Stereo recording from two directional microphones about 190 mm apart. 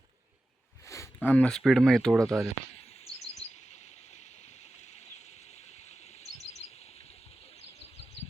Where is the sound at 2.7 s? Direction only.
35° left (ahead or behind).